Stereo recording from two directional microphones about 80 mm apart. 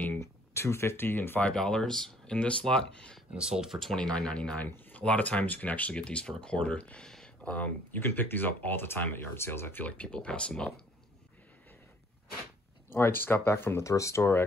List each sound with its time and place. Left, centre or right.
0.2 s speech: left
1.4 s speech: centre
3.3 s speech: centre
3.9 s speech: centre; by 9.8 s left
9.8 s speech: centre
12.9 s speech: left